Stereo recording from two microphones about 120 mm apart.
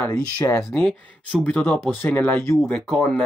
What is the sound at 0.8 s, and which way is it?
Speech, 5° left (ahead or behind).